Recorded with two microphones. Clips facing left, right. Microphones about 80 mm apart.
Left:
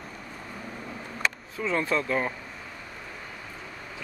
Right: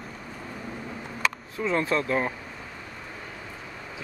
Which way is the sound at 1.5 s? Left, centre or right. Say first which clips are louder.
Right 2 dB; centre.